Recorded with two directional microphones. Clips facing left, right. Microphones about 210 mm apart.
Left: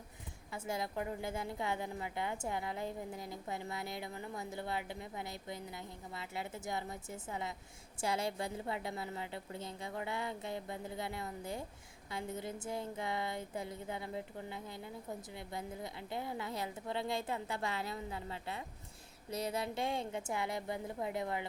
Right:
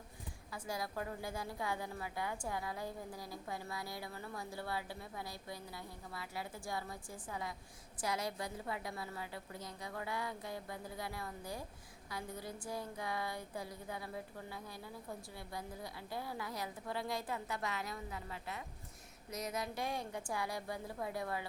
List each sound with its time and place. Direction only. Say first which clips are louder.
0.5 s a woman's voice: left 3 dB; 25° left (ahead or behind)